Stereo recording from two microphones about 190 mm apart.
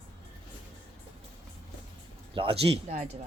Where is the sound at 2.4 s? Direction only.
30° right (ahead or behind).